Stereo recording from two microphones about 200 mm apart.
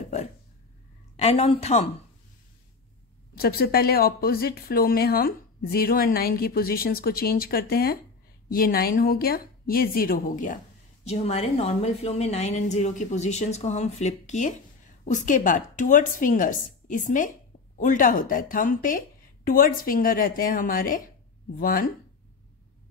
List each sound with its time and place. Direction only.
0.0 s a sound: 35° left (ahead or behind)
1.1 s a woman's voice: 30° left (ahead or behind)
3.3 s a woman's voice: 50° left (ahead or behind)